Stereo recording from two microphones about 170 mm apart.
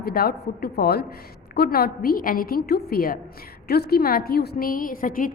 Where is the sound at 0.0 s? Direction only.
65° left (ahead or behind).